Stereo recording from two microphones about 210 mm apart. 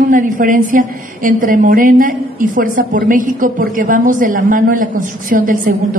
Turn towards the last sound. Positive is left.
turn(degrees=-40)  # may be behind; listen again after turning